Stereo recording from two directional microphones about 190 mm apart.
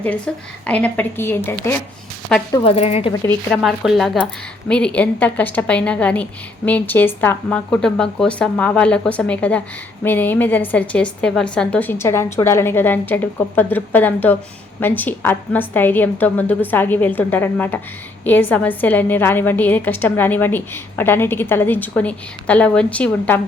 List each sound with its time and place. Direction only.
0.7 s a woman's voice: 10° left (ahead or behind)
2.6 s a woman's voice: 30° left (ahead or behind)
3.5 s a woman's voice: centre (ahead or behind)